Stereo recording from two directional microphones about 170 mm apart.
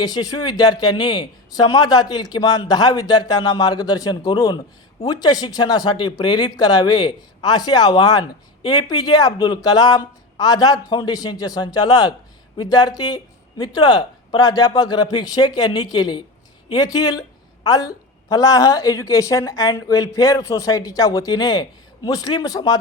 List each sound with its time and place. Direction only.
0.0 s a woman's voice: 20° left (ahead or behind)